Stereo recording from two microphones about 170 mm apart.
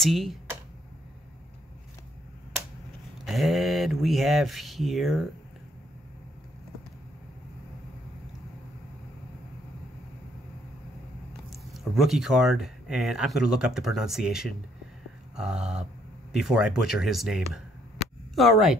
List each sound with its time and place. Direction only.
0.0 s speech: centre (ahead or behind)
3.3 s speech: centre (ahead or behind)
11.5 s speech: centre (ahead or behind)